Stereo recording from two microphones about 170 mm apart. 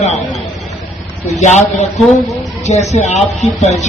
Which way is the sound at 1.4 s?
40° left (ahead or behind).